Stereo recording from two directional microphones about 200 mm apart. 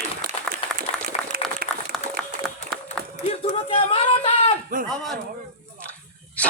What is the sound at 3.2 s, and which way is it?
Speech, 30° left (ahead or behind).